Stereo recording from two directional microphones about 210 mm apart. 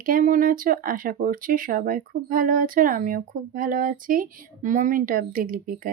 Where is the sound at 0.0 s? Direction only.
40° right (ahead or behind).